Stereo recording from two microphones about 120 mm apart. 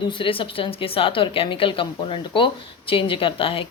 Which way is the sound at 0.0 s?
45° left (ahead or behind).